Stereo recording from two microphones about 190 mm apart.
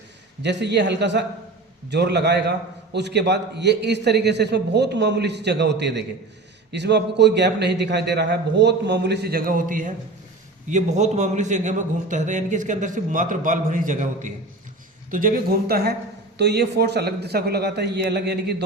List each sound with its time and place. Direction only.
0.4 s a man's voice: 65° right (ahead or behind)